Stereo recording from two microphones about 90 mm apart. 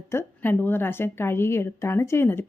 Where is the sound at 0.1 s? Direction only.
25° left (ahead or behind).